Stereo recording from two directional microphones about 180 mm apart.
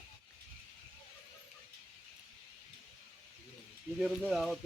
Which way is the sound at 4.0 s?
Centre (ahead or behind).